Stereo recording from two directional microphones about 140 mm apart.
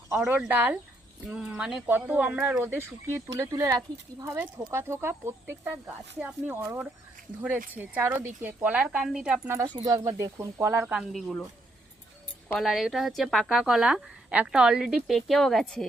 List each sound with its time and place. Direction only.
0.1 s speech: 15° right (ahead or behind)
9.6 s speech: 30° right (ahead or behind); by 11.3 s 5° right (ahead or behind)
12.5 s a woman's voice: centre (ahead or behind)